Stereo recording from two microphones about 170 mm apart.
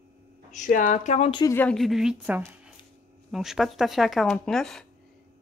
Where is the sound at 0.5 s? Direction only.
50° left (ahead or behind).